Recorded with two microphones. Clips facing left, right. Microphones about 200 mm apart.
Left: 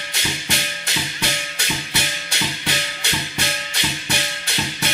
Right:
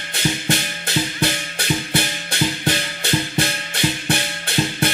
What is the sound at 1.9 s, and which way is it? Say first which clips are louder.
Music: right 5 dB; 55° right (ahead or behind).